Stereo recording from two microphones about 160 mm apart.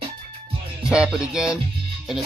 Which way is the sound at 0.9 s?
5° right (ahead or behind).